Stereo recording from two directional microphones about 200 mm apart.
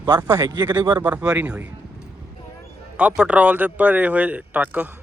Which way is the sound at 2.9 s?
5° right (ahead or behind).